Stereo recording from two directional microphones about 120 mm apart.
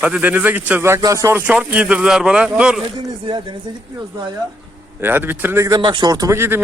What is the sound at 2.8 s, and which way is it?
Speech, 40° right (ahead or behind).